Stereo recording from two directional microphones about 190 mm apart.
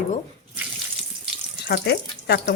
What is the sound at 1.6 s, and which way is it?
Speech, 60° left (ahead or behind).